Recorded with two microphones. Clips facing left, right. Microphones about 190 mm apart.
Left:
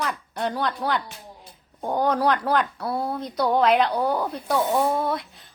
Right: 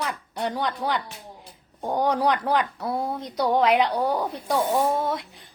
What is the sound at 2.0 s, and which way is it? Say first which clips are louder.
A woman's voice: left 1 dB; 15° right (ahead or behind).